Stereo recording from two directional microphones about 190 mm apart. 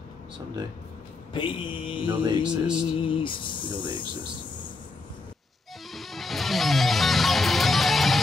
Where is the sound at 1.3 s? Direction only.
25° left (ahead or behind).